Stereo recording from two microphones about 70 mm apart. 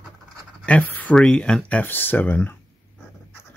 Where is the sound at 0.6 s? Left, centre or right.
Left.